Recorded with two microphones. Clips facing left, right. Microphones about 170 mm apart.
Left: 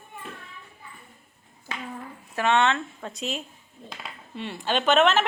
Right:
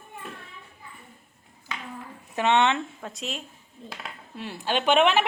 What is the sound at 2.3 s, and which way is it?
Speech, 20° right (ahead or behind).